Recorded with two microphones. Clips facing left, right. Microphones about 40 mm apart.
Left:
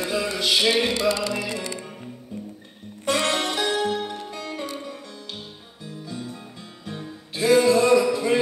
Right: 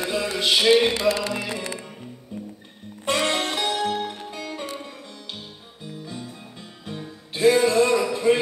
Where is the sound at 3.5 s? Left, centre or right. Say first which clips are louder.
Left 1 dB; centre.